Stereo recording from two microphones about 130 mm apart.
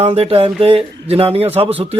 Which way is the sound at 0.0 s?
50° right (ahead or behind).